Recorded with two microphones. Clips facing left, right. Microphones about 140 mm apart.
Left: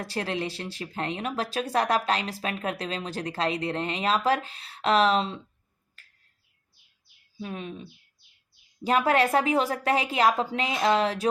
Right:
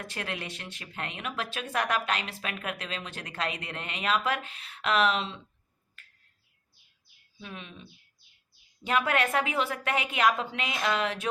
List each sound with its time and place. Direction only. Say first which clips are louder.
0.0 s speech: left 7 dB; 35° left (ahead or behind)
6.0 s finger snapping: right 1 dB; 35° left (ahead or behind)
7.3 s speech: left 8 dB; 40° left (ahead or behind)